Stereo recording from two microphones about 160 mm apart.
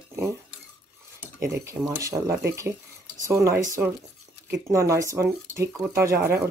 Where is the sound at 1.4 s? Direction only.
15° right (ahead or behind).